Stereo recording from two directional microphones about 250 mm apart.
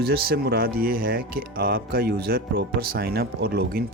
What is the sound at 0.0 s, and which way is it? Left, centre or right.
Speech, right.